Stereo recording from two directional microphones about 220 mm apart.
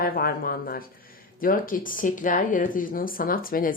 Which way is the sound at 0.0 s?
45° left (ahead or behind).